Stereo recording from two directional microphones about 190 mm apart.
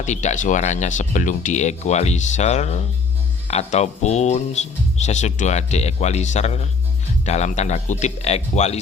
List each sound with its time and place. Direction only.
0.0 s speech: 40° left (ahead or behind)